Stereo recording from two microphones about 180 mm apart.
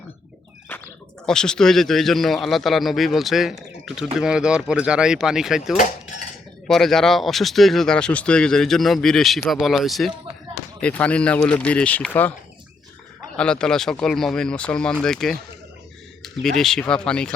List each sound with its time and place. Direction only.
1.3 s a man's voice: 5° left (ahead or behind)
13.3 s a man's voice: 5° left (ahead or behind)